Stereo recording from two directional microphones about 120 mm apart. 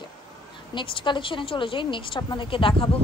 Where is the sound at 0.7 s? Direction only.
45° left (ahead or behind).